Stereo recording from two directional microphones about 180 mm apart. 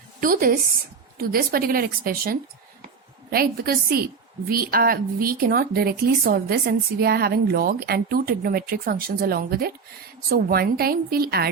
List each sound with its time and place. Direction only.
0.2 s a woman's voice: 50° right (ahead or behind)